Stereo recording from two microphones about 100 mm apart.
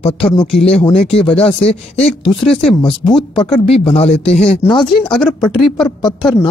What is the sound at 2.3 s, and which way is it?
Speech, 5° left (ahead or behind).